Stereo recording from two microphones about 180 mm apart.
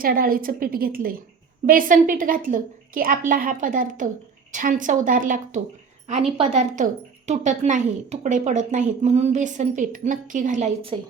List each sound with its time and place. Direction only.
0.0 s a woman's voice: 55° right (ahead or behind)
6.3 s a woman's voice: 35° right (ahead or behind)